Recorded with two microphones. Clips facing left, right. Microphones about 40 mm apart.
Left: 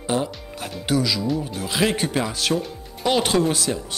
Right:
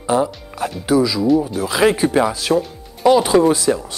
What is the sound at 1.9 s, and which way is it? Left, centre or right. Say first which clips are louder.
Speech: right 8 dB; right.